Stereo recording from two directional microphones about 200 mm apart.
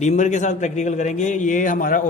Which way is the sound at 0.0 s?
35° left (ahead or behind).